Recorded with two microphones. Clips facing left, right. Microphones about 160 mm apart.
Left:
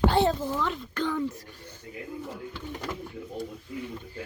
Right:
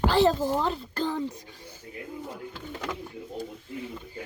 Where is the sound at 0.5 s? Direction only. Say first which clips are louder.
Right 2 dB; 35° right (ahead or behind).